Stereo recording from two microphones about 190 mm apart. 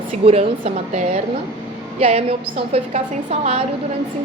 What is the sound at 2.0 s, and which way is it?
A woman's voice, 30° right (ahead or behind).